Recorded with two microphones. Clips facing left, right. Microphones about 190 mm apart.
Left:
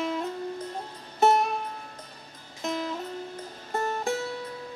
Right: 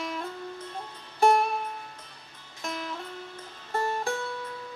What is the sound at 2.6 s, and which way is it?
Music, 20° left (ahead or behind).